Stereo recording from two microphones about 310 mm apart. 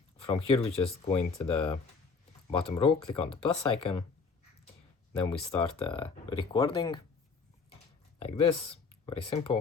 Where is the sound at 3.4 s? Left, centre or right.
Centre.